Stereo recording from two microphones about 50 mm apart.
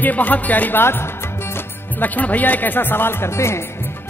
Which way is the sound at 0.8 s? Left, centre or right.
Left.